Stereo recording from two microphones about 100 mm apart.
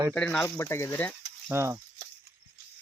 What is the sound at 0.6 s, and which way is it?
Speech, 30° left (ahead or behind).